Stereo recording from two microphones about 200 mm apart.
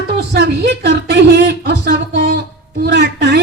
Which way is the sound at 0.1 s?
55° right (ahead or behind).